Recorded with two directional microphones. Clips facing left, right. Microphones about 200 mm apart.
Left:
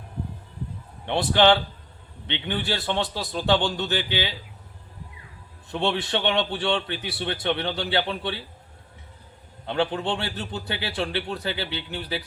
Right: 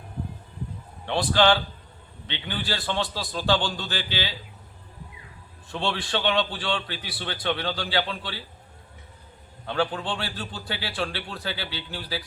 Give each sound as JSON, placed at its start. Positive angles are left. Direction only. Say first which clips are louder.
{"t": 1.0, "sound": "a man's voice", "louder": "left 2 dB", "side_deg": 20}
{"t": 5.7, "sound": "a man's voice", "louder": "left 3 dB", "side_deg": 20}
{"t": 9.6, "sound": "a man's voice", "louder": "left 2 dB", "side_deg": 20}